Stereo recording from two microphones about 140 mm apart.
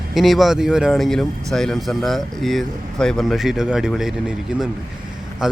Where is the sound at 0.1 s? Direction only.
Centre (ahead or behind).